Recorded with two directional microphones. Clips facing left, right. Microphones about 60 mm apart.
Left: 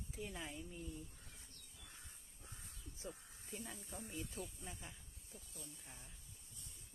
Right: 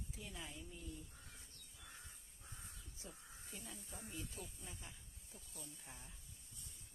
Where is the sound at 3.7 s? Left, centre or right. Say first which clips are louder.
Left 3 dB; centre.